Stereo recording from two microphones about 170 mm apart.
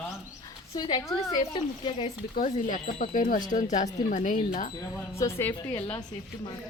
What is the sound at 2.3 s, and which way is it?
Speech, 50° left (ahead or behind).